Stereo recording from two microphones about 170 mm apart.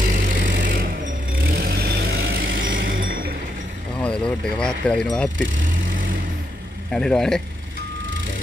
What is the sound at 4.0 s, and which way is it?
Speech, 5° left (ahead or behind).